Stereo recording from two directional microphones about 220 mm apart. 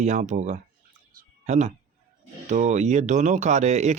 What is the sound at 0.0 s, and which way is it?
Speech, 30° right (ahead or behind).